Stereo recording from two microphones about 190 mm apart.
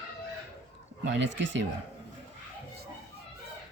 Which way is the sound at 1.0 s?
70° right (ahead or behind).